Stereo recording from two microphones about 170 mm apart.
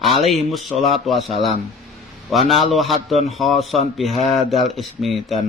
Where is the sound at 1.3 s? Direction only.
35° left (ahead or behind).